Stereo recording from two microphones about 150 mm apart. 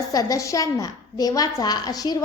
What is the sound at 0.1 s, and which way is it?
A woman's voice, 25° left (ahead or behind).